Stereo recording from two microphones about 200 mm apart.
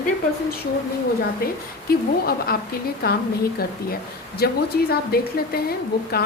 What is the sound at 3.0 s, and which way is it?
Speech, 50° left (ahead or behind).